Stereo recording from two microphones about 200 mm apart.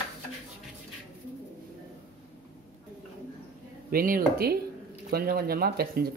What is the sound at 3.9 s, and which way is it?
Speech, 45° right (ahead or behind).